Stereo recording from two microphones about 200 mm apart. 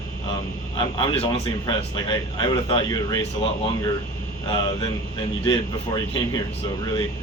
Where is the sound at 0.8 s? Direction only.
25° left (ahead or behind).